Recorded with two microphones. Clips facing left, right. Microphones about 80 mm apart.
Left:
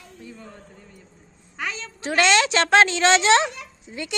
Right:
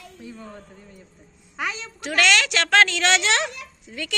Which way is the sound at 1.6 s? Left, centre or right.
Centre.